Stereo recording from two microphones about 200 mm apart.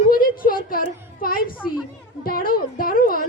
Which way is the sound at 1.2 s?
45° left (ahead or behind).